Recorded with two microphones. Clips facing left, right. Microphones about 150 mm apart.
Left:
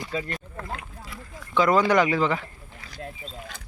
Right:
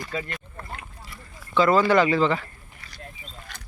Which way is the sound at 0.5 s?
90° left.